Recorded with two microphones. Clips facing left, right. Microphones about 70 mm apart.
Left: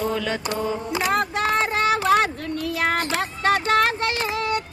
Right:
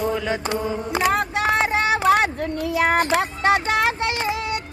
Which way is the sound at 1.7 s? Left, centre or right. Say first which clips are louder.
Even; centre.